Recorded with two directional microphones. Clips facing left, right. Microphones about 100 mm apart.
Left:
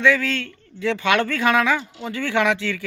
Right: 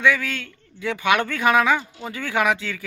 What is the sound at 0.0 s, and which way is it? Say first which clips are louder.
Speech: left 2 dB; 15° right (ahead or behind).